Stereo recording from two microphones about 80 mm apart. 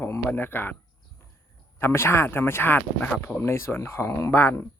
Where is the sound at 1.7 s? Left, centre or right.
Left.